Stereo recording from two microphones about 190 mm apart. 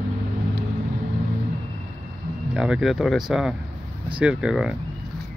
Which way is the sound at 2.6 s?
5° right (ahead or behind).